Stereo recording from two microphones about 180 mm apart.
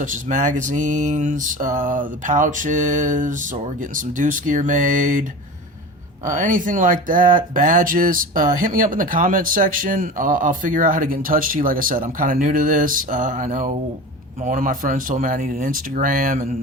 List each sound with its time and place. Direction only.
0.0 s speech: 45° right (ahead or behind)
6.2 s speech: 45° right (ahead or behind)